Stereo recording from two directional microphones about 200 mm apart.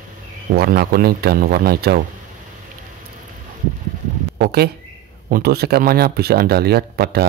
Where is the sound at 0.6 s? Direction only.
50° right (ahead or behind).